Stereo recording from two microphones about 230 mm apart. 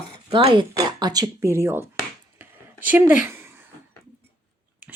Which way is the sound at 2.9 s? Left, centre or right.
Centre.